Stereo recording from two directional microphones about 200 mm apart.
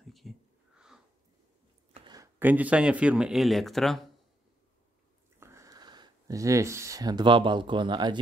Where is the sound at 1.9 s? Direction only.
20° right (ahead or behind); by 4.1 s centre (ahead or behind).